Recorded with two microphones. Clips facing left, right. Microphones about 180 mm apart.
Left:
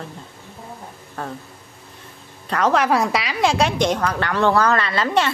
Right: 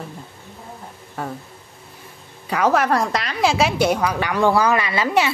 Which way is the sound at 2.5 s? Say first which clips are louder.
Right 1 dB; 10° right (ahead or behind).